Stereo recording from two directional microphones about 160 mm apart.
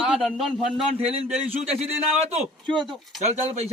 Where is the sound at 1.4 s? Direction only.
40° right (ahead or behind).